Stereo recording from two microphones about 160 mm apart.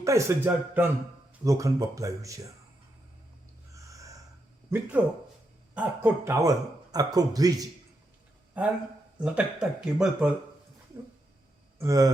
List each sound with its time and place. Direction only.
0.0 s speech: 20° right (ahead or behind)
3.7 s a sound: 20° right (ahead or behind)
5.0 s speech: 5° right (ahead or behind); by 7.7 s 25° right (ahead or behind)
8.6 s speech: 10° right (ahead or behind)
11.8 s speech: 20° right (ahead or behind)